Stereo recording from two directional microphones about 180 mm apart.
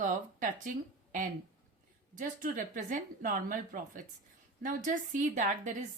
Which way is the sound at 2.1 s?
45° right (ahead or behind).